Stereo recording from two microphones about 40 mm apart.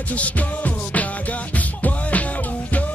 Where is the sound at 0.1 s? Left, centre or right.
Left.